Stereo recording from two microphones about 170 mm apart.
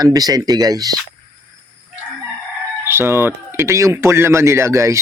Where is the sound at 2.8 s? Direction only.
15° right (ahead or behind).